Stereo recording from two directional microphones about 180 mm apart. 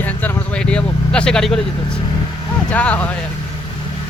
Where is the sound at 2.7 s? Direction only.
5° left (ahead or behind).